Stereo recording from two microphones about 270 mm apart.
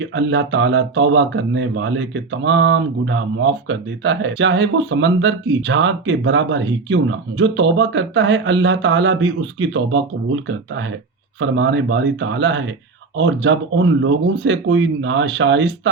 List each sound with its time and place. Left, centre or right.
0.0 s speech: right